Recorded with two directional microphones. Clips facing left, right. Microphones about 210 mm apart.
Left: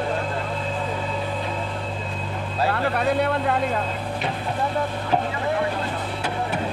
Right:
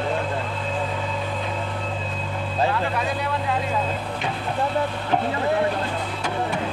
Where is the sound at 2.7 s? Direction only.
60° left (ahead or behind).